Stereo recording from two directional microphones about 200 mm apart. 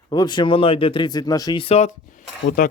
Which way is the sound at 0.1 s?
20° left (ahead or behind).